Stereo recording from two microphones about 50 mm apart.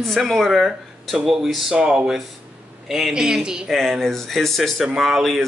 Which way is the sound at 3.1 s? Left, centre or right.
Centre.